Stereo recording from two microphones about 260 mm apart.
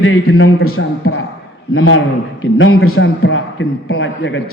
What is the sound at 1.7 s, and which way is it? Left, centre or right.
A man's voice, left.